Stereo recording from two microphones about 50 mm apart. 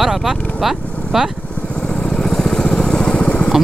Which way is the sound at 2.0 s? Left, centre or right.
Centre.